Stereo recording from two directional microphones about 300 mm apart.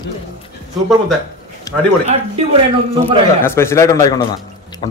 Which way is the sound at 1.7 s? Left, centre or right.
Centre.